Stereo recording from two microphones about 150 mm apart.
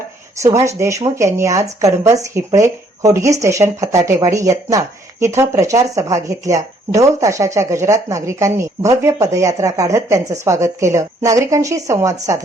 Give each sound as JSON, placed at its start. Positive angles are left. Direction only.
{"t": 0.3, "sound": "speech", "side_deg": -20}